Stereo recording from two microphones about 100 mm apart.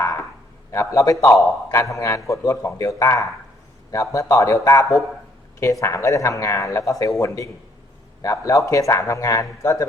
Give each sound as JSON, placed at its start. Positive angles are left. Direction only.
{"t": 0.7, "sound": "a man's voice", "side_deg": 30}